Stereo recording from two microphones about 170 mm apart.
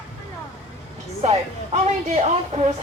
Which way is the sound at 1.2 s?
40° right (ahead or behind).